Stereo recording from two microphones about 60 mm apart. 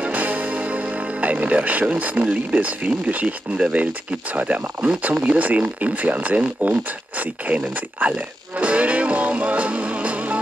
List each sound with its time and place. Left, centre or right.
0.0 s music: right
2.5 s speech: right
8.5 s music: right